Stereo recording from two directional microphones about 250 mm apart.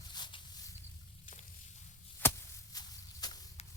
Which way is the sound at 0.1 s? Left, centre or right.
Centre.